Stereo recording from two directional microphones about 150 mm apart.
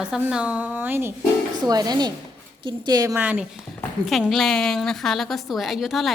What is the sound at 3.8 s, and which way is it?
A woman's voice, centre (ahead or behind).